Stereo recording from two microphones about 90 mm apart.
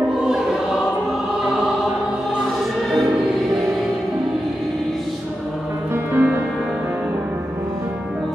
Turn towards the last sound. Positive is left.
turn(degrees=-25)  # may be behind; listen again after turning